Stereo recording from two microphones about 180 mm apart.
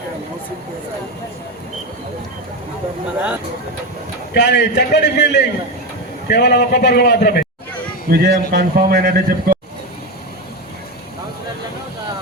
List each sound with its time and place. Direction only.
4.4 s a man's voice: 70° left (ahead or behind)
8.1 s a man's voice: 60° right (ahead or behind)